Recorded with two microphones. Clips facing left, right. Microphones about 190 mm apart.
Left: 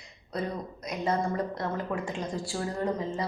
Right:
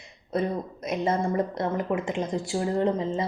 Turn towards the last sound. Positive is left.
turn(degrees=-20)  # may be behind; listen again after turning